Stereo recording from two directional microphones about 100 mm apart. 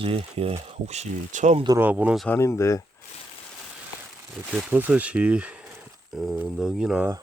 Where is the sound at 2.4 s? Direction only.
30° left (ahead or behind).